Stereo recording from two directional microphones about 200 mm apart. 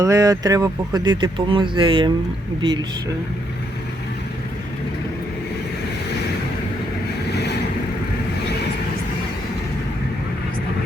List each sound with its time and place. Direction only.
0.0 s speech: 15° right (ahead or behind)
7.3 s boat: 55° left (ahead or behind)